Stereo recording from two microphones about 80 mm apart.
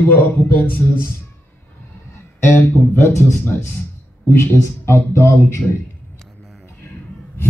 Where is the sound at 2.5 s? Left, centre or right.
Left.